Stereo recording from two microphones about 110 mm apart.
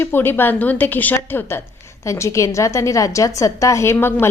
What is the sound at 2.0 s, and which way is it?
A woman's voice, 25° left (ahead or behind).